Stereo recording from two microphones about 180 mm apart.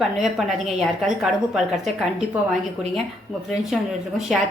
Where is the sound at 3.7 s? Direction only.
Centre (ahead or behind).